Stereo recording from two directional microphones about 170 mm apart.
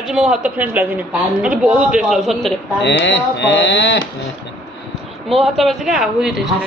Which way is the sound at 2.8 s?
90° left.